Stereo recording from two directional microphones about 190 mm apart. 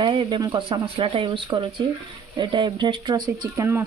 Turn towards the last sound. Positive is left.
turn(degrees=-15)  # may be behind; listen again after turning